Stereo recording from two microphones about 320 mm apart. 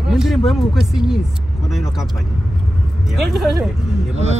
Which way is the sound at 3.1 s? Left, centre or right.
Centre.